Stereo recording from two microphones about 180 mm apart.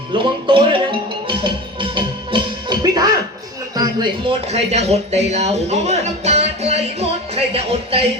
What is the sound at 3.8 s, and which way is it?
Speech, 25° right (ahead or behind).